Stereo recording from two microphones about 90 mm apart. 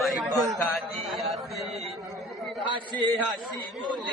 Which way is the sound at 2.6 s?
60° right (ahead or behind).